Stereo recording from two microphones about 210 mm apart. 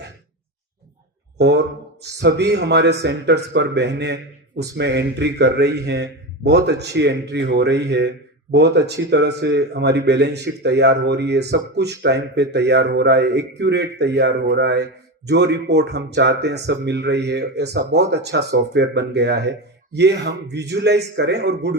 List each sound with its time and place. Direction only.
1.4 s a man's voice: 55° right (ahead or behind)